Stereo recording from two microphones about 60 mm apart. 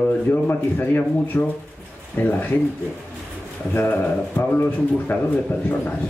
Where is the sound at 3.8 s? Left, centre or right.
Left.